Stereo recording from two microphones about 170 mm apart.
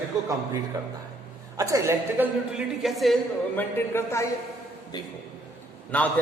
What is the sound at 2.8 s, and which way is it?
Speech, centre (ahead or behind).